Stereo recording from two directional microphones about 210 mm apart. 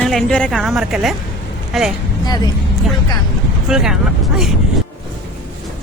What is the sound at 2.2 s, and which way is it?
Speech, 20° left (ahead or behind).